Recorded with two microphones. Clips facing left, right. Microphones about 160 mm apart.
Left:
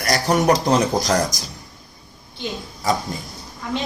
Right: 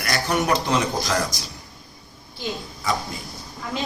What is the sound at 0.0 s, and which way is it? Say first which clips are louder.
A man's voice: left 5 dB; 40° left (ahead or behind).